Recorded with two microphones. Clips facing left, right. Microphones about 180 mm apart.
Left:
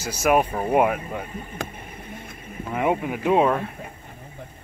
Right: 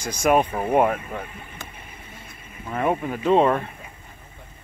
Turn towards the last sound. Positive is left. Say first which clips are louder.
# right 1 dB
turn(degrees=5)  # may be behind; listen again after turning